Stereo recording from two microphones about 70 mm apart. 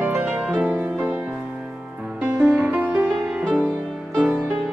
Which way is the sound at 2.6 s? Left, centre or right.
Right.